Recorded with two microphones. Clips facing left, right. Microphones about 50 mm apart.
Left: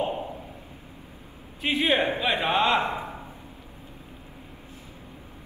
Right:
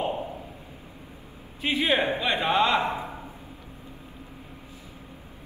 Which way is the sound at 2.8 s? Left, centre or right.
Left.